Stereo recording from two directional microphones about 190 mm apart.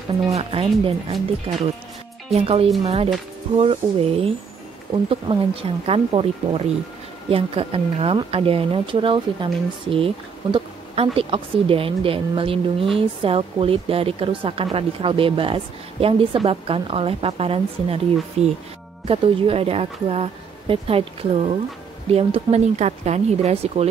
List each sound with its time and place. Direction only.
0.3 s a woman's voice: 30° right (ahead or behind)
5.3 s a woman's voice: 25° right (ahead or behind)